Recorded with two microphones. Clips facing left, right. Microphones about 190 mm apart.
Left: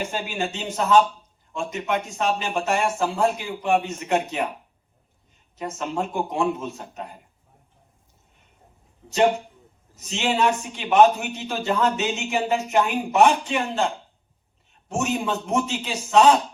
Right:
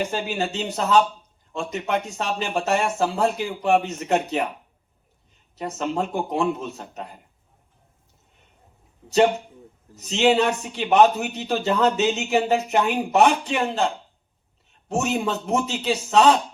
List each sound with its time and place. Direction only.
0.0 s speech: 40° right (ahead or behind)
5.5 s speech: 35° right (ahead or behind)
9.9 s speech: 35° right (ahead or behind)